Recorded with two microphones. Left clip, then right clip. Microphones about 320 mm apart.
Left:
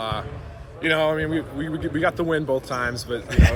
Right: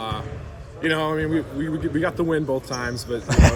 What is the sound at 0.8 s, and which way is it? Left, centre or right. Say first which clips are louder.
Speech: left 2 dB; centre.